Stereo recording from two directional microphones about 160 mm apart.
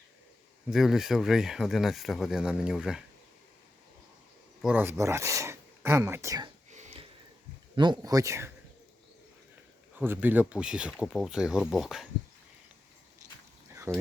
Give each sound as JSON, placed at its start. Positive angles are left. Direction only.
{"t": 0.7, "sound": "speech", "side_deg": 0}
{"t": 4.6, "sound": "speech", "side_deg": -10}
{"t": 6.7, "sound": "a sound", "side_deg": -45}
{"t": 7.8, "sound": "speech", "side_deg": -25}
{"t": 10.0, "sound": "speech", "side_deg": -10}
{"t": 13.9, "sound": "speech", "side_deg": -20}